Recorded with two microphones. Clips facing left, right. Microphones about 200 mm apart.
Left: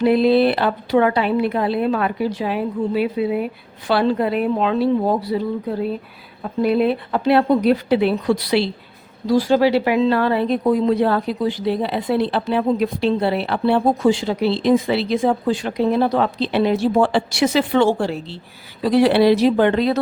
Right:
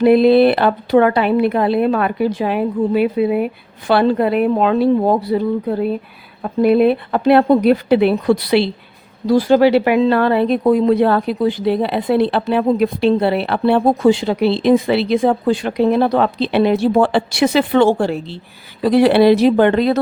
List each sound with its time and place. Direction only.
0.0 s speech: 60° right (ahead or behind)
6.6 s speech: 55° right (ahead or behind)